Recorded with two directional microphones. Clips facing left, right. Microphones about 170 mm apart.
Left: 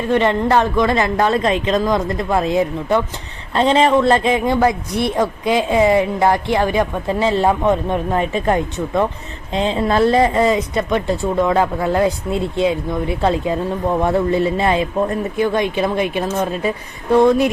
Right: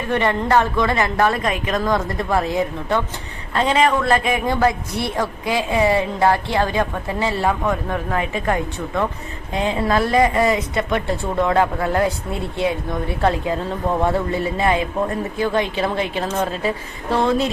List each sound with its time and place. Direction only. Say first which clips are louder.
0.1 s a man's voice: left 3 dB; 20° left (ahead or behind)